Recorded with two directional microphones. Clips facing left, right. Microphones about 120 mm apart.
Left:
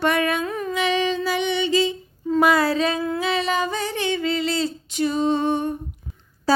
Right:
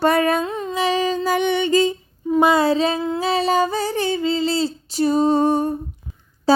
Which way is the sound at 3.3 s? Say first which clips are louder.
Right 7 dB; 35° right (ahead or behind).